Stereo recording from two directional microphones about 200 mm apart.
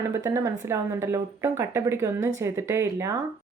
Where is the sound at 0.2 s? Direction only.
15° right (ahead or behind).